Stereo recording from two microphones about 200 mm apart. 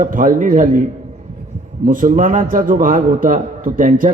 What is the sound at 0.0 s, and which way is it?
A man's voice, 40° right (ahead or behind).